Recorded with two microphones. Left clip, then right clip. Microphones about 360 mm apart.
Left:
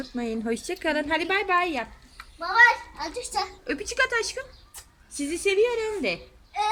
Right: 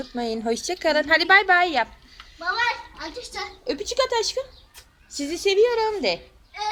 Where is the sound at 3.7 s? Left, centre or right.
Centre.